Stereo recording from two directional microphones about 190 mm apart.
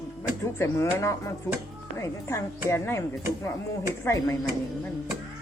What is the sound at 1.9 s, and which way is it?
Speech, 15° left (ahead or behind).